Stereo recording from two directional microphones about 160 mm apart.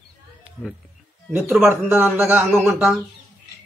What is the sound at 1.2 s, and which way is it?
A man's voice, centre (ahead or behind).